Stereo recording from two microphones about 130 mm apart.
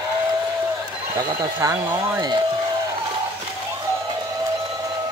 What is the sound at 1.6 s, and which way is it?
Speech, 25° right (ahead or behind).